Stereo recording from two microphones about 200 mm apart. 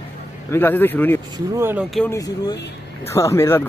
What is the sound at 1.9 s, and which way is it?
Speech, 5° left (ahead or behind).